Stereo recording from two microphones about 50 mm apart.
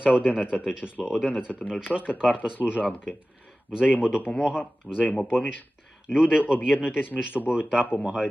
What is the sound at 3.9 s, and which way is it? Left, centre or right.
Speech, centre.